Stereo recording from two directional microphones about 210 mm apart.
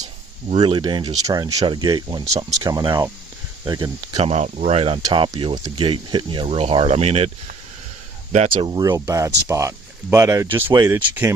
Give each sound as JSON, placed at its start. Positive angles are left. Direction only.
{"t": 0.5, "sound": "speech", "side_deg": -20}
{"t": 4.3, "sound": "speech", "side_deg": -35}
{"t": 8.3, "sound": "speech", "side_deg": -30}
{"t": 8.7, "sound": "speech", "side_deg": -20}